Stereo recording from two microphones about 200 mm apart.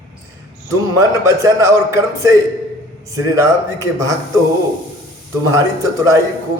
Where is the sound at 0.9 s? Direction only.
15° right (ahead or behind).